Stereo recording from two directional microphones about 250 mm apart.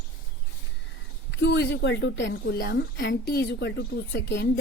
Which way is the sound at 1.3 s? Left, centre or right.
Left.